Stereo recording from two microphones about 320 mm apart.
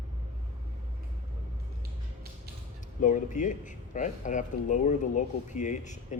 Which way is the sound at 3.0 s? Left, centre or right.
Left.